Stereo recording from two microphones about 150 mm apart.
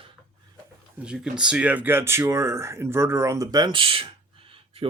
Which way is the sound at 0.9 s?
5° right (ahead or behind).